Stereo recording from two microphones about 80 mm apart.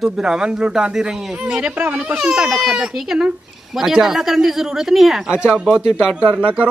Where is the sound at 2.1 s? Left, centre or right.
Centre.